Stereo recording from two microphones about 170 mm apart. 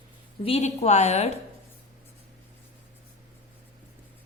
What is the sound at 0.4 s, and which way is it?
Speech, 40° left (ahead or behind).